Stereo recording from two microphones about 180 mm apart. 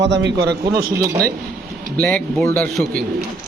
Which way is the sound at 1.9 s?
5° left (ahead or behind).